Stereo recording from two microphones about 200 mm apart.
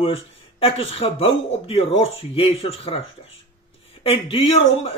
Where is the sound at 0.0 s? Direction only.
30° left (ahead or behind).